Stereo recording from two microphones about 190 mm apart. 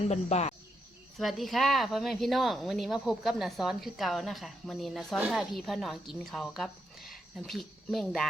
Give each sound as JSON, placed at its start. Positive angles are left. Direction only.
{"t": 0.1, "sound": "cricket", "side_deg": 35}
{"t": 1.2, "sound": "speech", "side_deg": 0}